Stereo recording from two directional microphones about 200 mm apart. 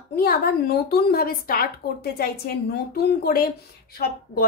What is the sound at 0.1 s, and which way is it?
A woman's voice, 50° left (ahead or behind).